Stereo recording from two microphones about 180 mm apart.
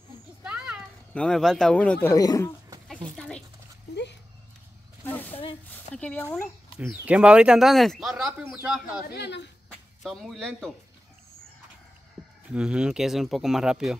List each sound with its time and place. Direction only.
0.4 s speech: 5° right (ahead or behind); by 2.5 s 20° left (ahead or behind)
3.2 s zipper: 5° left (ahead or behind)
3.9 s a sound: 70° left (ahead or behind)
5.0 s a sound: 10° left (ahead or behind)
5.4 s a sound: 30° left (ahead or behind)
5.9 s speech: 10° left (ahead or behind)
6.8 s speech: 10° right (ahead or behind)
9.1 s speech: 65° left (ahead or behind)
9.7 s speech: centre (ahead or behind)
12.5 s speech: 5° right (ahead or behind)